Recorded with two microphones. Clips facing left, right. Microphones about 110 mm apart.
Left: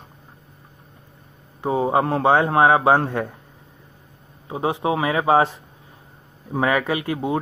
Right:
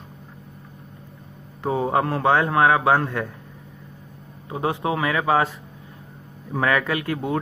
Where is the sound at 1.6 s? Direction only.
15° left (ahead or behind).